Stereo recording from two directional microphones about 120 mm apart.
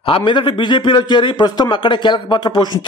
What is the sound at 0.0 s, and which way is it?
A man's voice, 45° left (ahead or behind).